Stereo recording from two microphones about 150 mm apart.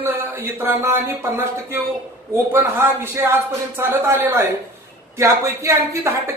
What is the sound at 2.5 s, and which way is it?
Speech, 15° right (ahead or behind).